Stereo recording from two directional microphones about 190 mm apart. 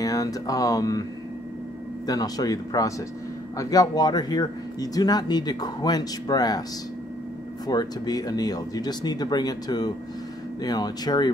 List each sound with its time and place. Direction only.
0.0 s speech: 20° left (ahead or behind)
2.0 s speech: 20° left (ahead or behind)
7.6 s speech: 20° left (ahead or behind)